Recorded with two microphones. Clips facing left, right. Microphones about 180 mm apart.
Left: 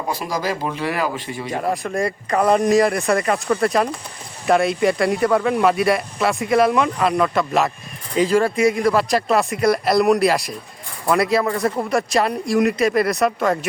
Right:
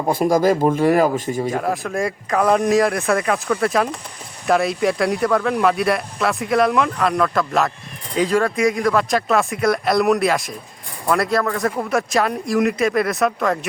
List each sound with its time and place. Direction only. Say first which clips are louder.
0.1 s speech: right 9 dB; 50° right (ahead or behind)
1.5 s speech: right 1 dB; centre (ahead or behind)